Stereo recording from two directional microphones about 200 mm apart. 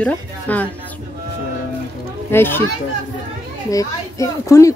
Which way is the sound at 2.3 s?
10° left (ahead or behind).